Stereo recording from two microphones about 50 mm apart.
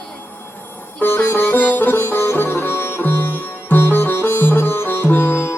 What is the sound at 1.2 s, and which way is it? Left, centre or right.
Music, left.